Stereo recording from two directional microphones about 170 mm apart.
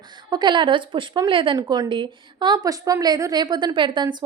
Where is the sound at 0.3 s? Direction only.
25° right (ahead or behind).